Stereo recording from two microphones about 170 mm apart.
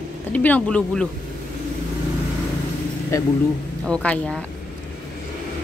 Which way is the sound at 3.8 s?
5° left (ahead or behind).